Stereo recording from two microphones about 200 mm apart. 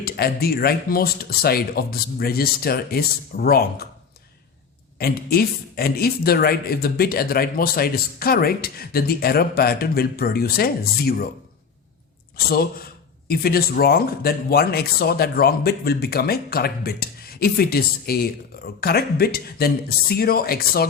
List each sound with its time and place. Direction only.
0.0 s speech: 50° left (ahead or behind)
4.9 s speech: 50° left (ahead or behind)
12.5 s speech: 50° left (ahead or behind)